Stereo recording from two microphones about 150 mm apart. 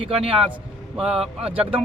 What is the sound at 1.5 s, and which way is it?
Speech, 10° right (ahead or behind).